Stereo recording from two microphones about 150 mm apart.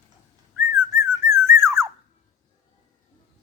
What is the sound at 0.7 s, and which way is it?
Whistling, 20° right (ahead or behind).